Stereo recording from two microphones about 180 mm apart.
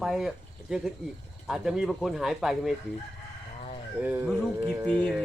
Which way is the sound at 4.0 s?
10° right (ahead or behind).